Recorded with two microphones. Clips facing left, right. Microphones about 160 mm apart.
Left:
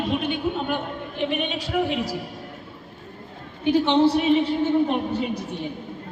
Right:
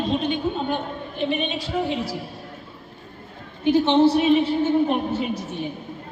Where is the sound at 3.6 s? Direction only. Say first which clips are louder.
Right 1 dB; 15° left (ahead or behind).